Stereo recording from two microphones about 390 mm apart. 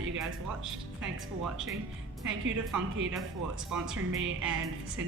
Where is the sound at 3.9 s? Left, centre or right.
Right.